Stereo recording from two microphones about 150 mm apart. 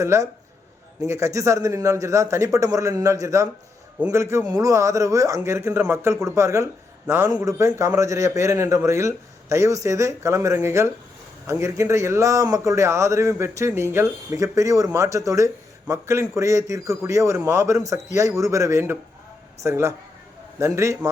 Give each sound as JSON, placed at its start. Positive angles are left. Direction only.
{"t": 0.0, "sound": "a man's voice", "side_deg": -20}